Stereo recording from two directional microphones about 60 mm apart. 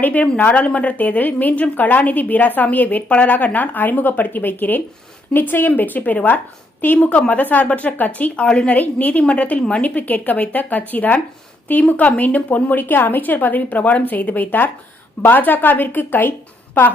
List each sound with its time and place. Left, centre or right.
0.0 s a woman's voice: left